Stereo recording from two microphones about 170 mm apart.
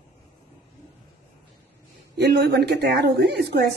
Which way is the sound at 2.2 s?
85° right.